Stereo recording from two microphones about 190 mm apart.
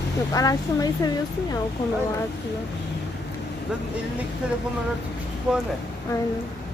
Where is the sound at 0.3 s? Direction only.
20° left (ahead or behind).